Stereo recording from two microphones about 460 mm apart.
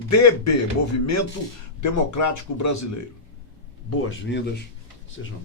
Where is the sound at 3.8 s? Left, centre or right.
Left.